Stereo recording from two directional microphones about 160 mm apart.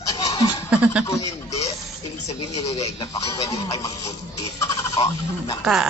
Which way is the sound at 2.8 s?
20° left (ahead or behind).